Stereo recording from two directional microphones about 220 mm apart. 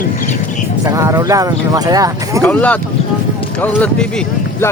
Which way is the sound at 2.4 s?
5° left (ahead or behind).